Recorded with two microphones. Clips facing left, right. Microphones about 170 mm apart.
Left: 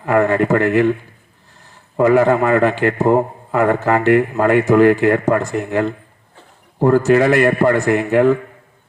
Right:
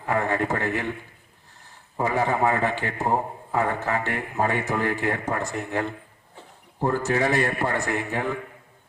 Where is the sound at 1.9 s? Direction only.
90° left.